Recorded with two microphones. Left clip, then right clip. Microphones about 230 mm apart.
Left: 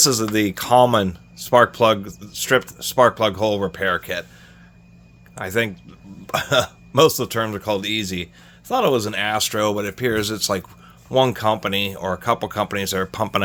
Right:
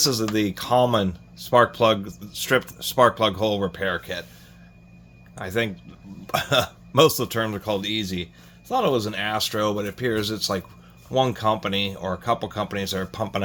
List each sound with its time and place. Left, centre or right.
0.0 s speech: left
5.3 s speech: left